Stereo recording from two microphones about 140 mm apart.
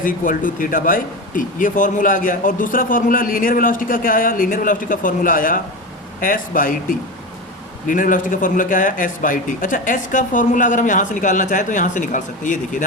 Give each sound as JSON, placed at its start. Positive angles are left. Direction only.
{"t": 0.0, "sound": "speech", "side_deg": 75}